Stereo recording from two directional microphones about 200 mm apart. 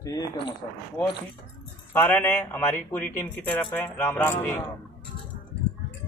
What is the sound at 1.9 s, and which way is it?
Speech, 10° left (ahead or behind).